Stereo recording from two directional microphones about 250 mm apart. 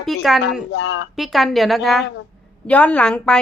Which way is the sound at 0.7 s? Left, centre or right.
Left.